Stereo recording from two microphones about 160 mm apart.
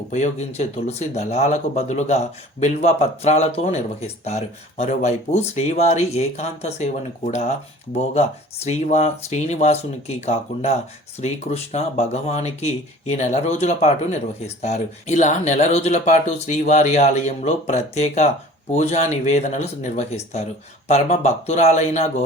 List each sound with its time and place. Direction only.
0.1 s speech: 45° left (ahead or behind)